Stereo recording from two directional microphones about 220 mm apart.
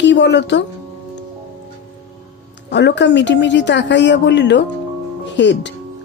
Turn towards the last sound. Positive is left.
turn(degrees=55)  # may be behind; listen again after turning